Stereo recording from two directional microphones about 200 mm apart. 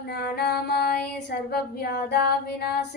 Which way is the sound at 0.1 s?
50° left (ahead or behind).